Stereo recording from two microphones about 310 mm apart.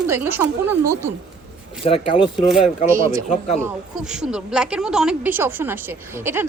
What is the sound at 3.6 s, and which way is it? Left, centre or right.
A woman's voice, centre.